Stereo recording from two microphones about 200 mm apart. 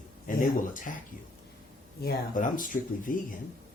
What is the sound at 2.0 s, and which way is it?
Speech, 45° left (ahead or behind).